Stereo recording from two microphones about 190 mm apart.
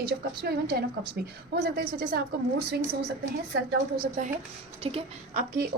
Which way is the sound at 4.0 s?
45° right (ahead or behind).